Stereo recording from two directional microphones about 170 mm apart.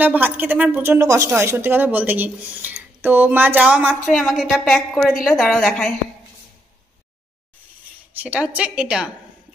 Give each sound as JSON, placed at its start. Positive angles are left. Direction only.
{"t": 0.0, "sound": "a woman's voice", "side_deg": -10}
{"t": 8.1, "sound": "a woman's voice", "side_deg": -10}